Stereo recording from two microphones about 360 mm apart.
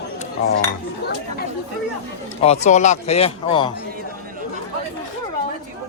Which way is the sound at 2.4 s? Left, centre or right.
Centre.